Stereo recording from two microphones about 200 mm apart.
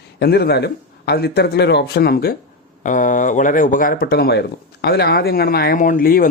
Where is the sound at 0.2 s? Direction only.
55° left (ahead or behind).